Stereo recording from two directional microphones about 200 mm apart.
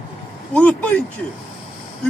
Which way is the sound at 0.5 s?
5° left (ahead or behind).